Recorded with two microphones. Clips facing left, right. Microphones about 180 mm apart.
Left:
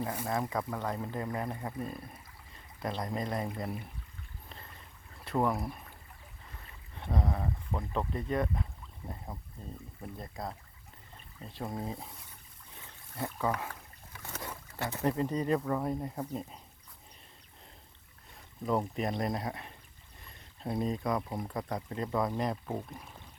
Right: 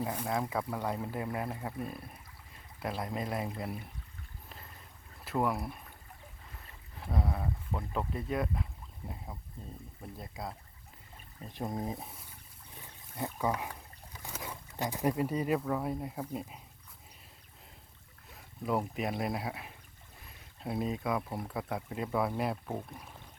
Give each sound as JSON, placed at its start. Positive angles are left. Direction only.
{"t": 0.2, "sound": "speech", "side_deg": 0}
{"t": 5.2, "sound": "speech", "side_deg": 0}
{"t": 6.9, "sound": "speech", "side_deg": -5}
{"t": 10.2, "sound": "speech", "side_deg": 0}
{"t": 11.4, "sound": "speech", "side_deg": -20}
{"t": 18.3, "sound": "speech", "side_deg": -5}